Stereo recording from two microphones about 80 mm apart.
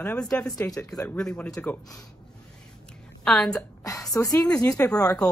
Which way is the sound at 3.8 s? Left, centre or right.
Left.